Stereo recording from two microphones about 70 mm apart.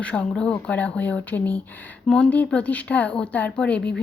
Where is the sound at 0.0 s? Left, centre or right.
Centre.